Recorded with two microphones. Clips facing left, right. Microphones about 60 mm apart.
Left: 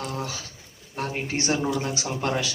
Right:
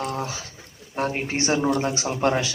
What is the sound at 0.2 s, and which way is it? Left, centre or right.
A man's voice, right.